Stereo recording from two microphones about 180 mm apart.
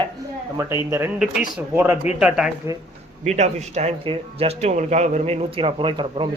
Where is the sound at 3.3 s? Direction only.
40° right (ahead or behind).